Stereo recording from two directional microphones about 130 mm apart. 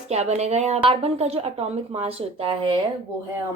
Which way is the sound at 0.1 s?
55° right (ahead or behind).